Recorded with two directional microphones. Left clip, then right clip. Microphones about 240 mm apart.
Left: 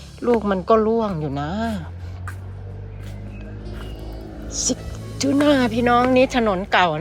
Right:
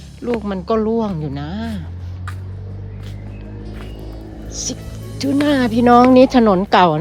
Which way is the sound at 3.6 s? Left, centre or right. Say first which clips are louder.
Right 2 dB; centre.